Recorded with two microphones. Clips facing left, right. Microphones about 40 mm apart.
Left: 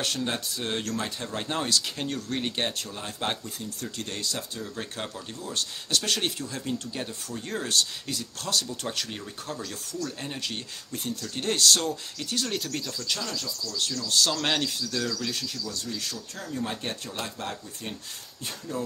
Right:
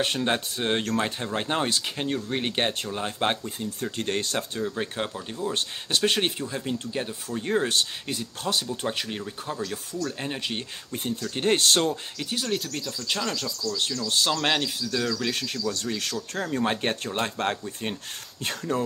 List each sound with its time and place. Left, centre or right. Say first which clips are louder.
0.0 s speech: right 4 dB; right
4.6 s speech: right 6 dB; right
12.4 s speech: right 2 dB; centre
13.2 s speech: right 4 dB; right
13.7 s speech: left 1 dB; right
15.1 s speech: right 4 dB; right